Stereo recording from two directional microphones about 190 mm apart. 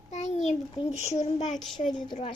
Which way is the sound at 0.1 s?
35° left (ahead or behind).